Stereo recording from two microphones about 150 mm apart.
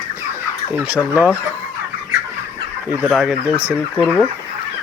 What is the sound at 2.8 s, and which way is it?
Speech, 10° right (ahead or behind).